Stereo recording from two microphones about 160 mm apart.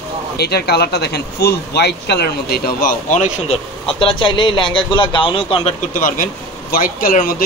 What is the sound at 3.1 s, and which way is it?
Speech, 45° left (ahead or behind).